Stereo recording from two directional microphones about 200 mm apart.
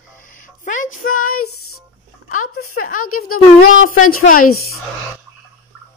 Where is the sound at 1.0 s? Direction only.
90° left.